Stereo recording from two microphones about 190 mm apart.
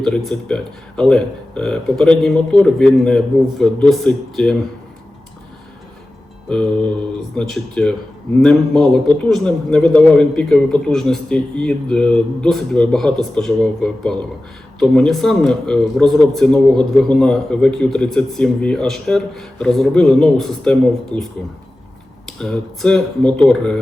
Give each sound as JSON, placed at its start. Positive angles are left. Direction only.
{"t": 0.0, "sound": "a man's voice", "side_deg": 5}
{"t": 6.5, "sound": "a man's voice", "side_deg": 5}
{"t": 22.3, "sound": "a man's voice", "side_deg": 5}